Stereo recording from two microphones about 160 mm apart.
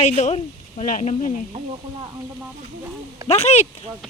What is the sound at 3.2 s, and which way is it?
Speech, 40° left (ahead or behind).